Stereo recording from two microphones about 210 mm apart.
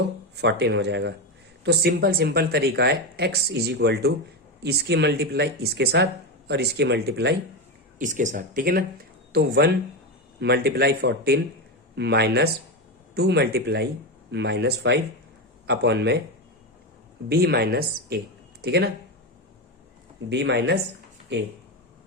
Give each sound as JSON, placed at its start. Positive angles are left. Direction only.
{"t": 0.3, "sound": "speech", "side_deg": -55}
{"t": 7.9, "sound": "speech", "side_deg": -35}
{"t": 17.2, "sound": "speech", "side_deg": -50}
{"t": 20.3, "sound": "speech", "side_deg": -55}